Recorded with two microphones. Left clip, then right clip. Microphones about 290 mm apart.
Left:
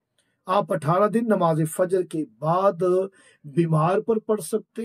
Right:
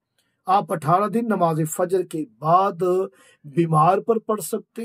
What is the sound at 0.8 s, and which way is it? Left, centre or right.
Speech, centre.